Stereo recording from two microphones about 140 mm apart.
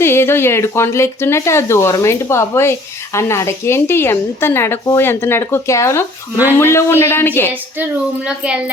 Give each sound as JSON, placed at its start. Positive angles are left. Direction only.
{"t": 0.0, "sound": "speech", "side_deg": 15}